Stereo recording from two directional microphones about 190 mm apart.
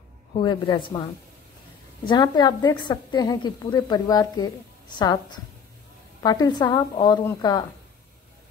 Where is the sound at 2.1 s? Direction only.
20° left (ahead or behind).